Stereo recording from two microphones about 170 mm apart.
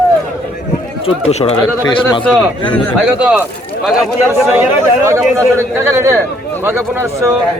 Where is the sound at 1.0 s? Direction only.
40° left (ahead or behind).